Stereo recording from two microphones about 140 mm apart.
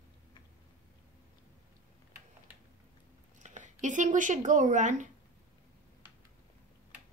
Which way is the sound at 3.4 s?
60° right (ahead or behind).